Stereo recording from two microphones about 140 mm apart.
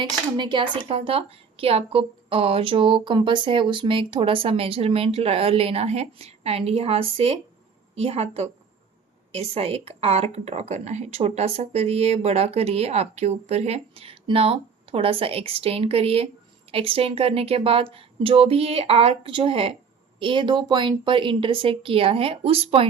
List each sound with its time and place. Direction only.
0.0 s a woman's voice: 35° right (ahead or behind)